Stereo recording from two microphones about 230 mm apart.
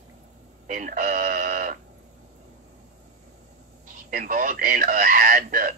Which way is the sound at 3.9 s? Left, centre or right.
Right.